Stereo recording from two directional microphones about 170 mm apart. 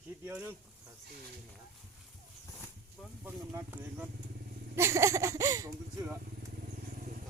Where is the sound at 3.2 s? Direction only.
10° right (ahead or behind).